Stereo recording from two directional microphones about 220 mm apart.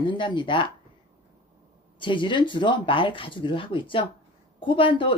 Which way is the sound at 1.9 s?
20° left (ahead or behind).